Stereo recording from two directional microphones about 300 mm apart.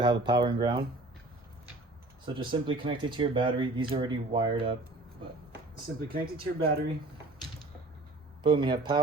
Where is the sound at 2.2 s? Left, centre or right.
Centre.